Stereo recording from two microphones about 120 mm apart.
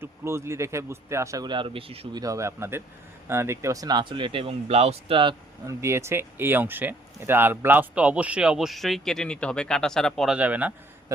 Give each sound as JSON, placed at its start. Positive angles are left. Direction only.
{"t": 0.0, "sound": "speech", "side_deg": -20}
{"t": 1.5, "sound": "speech", "side_deg": -45}
{"t": 2.1, "sound": "speech", "side_deg": -30}
{"t": 5.6, "sound": "speech", "side_deg": -25}
{"t": 10.3, "sound": "speech", "side_deg": -10}